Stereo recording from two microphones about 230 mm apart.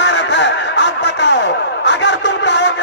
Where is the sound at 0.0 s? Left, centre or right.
Left.